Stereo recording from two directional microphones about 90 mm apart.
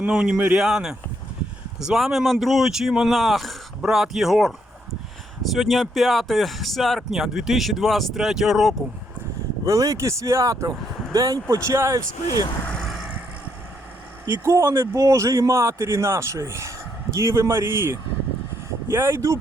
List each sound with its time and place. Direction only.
0.0 s speech: 10° right (ahead or behind)
9.6 s a man's voice: 35° right (ahead or behind)
12.8 s vehicle: centre (ahead or behind)
14.3 s a man's voice: 30° right (ahead or behind)